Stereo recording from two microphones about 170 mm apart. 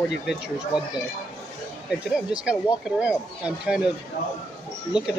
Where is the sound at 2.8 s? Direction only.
5° right (ahead or behind).